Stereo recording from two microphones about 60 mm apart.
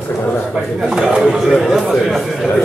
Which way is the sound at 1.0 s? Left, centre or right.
Centre.